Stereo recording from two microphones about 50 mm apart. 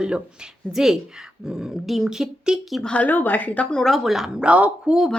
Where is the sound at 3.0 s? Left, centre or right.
Left.